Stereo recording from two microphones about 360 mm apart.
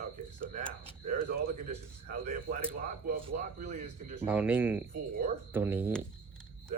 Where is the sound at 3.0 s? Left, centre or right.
Right.